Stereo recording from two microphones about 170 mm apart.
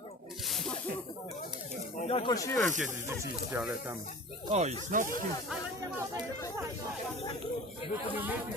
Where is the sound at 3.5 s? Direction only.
10° right (ahead or behind).